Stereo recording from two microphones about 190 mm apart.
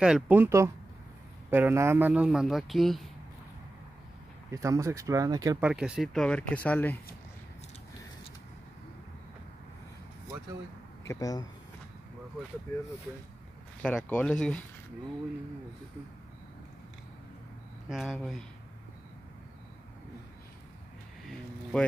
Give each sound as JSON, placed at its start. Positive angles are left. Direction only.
{"t": 0.0, "sound": "speech", "side_deg": -5}
{"t": 4.5, "sound": "speech", "side_deg": -15}
{"t": 5.6, "sound": "speech", "side_deg": -5}
{"t": 11.1, "sound": "speech", "side_deg": 20}
{"t": 12.7, "sound": "speech", "side_deg": 15}
{"t": 17.8, "sound": "speech", "side_deg": 0}
{"t": 21.7, "sound": "speech", "side_deg": 5}